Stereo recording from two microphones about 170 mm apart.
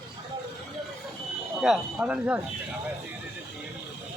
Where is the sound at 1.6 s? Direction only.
5° right (ahead or behind).